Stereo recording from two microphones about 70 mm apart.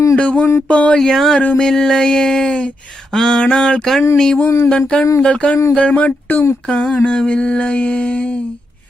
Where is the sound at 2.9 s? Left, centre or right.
Centre.